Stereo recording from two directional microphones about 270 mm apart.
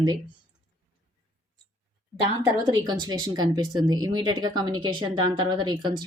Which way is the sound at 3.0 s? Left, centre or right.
Centre.